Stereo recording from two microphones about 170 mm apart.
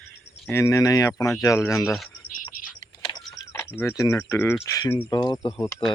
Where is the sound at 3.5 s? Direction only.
15° left (ahead or behind).